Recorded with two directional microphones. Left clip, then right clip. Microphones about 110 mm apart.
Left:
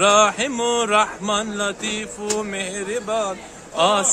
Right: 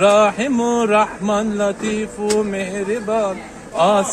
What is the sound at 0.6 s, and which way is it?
Speech, 35° left (ahead or behind).